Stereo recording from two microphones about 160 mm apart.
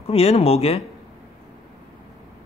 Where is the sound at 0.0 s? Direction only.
40° left (ahead or behind).